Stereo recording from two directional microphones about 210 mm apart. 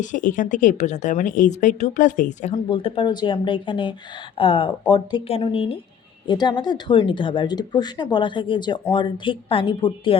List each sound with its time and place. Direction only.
0.0 s a woman's voice: 40° left (ahead or behind)